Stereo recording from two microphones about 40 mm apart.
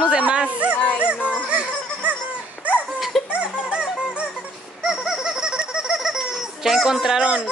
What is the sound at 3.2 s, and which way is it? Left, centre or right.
Music, right.